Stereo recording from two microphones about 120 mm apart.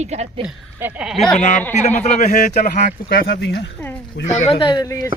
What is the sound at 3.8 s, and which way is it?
Speech, 15° left (ahead or behind).